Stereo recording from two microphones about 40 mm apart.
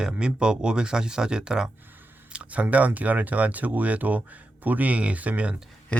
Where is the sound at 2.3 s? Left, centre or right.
Right.